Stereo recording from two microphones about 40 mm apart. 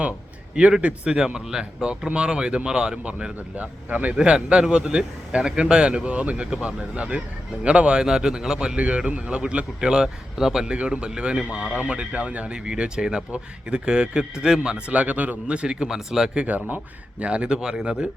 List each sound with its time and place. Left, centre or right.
0.8 s speech: right
1.2 s speech: centre; by 4.1 s right
4.2 s speech: right
8.7 s speech: right; by 10.7 s centre
10.7 s speech: right
14.9 s speech: right
15.9 s speech: centre
17.2 s speech: right